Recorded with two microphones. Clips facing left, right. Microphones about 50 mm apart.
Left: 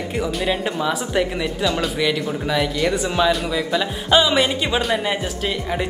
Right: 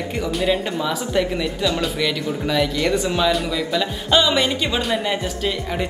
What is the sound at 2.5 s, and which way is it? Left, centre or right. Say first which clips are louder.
Speech: right 1 dB; centre.